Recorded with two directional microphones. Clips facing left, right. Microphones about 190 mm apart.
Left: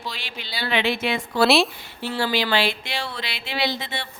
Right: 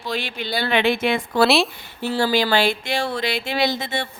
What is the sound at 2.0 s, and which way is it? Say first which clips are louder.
Speech: right 4 dB; 45° right (ahead or behind).